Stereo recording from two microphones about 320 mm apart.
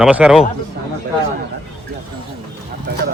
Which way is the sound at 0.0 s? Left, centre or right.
Centre.